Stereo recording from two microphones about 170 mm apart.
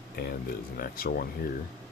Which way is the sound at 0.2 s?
65° left (ahead or behind).